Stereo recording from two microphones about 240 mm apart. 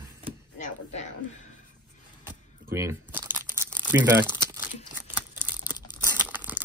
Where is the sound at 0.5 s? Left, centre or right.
Left.